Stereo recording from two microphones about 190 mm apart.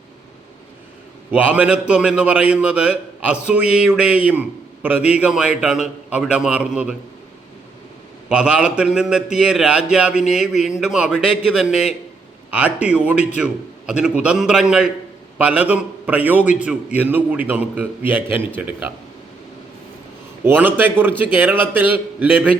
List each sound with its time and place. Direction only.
1.3 s a man's voice: 5° right (ahead or behind)
8.3 s a man's voice: 5° right (ahead or behind)
20.4 s a man's voice: 10° right (ahead or behind)